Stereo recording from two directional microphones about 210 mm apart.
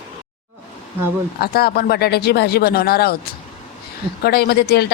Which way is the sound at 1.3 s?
50° left (ahead or behind).